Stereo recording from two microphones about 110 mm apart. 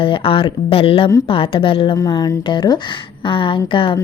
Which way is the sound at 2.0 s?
35° left (ahead or behind).